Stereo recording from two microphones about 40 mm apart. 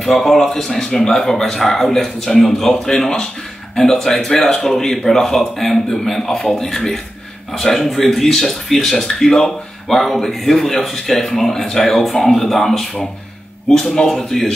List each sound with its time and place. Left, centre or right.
0.0 s speech: centre
14.0 s a man's voice: left